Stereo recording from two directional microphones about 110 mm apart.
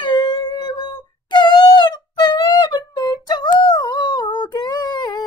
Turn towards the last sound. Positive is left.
turn(degrees=40)  # may be behind; listen again after turning